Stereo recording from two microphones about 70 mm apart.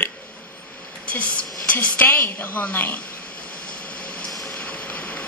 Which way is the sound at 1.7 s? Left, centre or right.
Left.